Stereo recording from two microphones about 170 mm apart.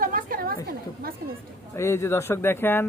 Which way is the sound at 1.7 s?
15° left (ahead or behind).